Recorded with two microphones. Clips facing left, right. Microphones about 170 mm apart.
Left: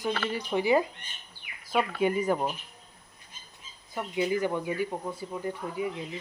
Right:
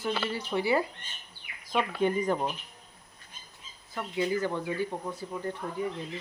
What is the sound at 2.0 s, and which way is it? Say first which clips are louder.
Speech: even; 10° left (ahead or behind).